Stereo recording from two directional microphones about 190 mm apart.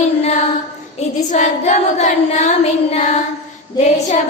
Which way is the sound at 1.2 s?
40° left (ahead or behind).